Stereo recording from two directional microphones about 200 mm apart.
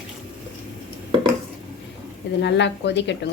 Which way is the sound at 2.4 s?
60° left (ahead or behind).